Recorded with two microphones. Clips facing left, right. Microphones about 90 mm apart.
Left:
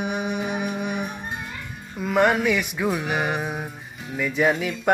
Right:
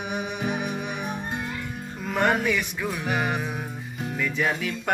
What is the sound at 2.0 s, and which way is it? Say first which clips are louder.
Music: left 4 dB; 15° left (ahead or behind).